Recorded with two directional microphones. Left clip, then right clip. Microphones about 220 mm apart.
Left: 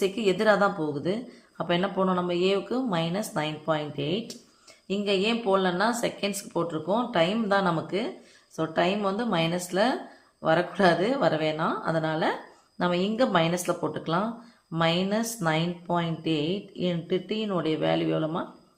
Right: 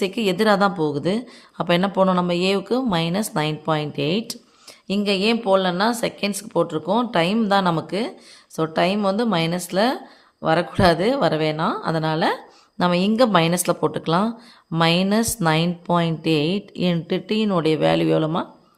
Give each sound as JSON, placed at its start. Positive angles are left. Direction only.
{"t": 0.0, "sound": "a woman's voice", "side_deg": -40}